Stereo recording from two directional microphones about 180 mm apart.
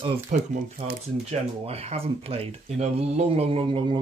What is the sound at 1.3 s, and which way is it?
Speech, 35° right (ahead or behind).